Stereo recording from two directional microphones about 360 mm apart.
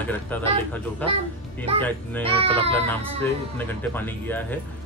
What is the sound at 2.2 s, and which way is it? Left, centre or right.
Speech, centre.